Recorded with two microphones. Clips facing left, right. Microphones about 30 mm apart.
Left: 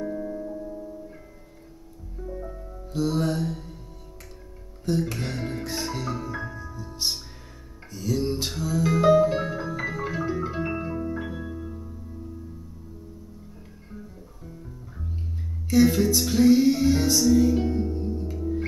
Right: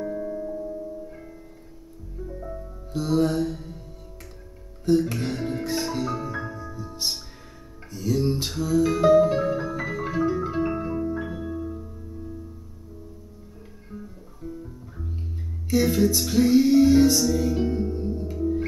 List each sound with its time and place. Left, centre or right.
0.0 s music: centre
2.4 s music: centre
4.8 s music: centre
13.9 s music: centre